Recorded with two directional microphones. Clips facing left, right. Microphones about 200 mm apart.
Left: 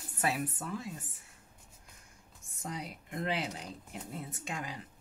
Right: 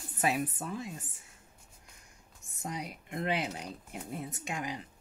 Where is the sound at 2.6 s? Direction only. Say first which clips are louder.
Right 2 dB; 15° right (ahead or behind).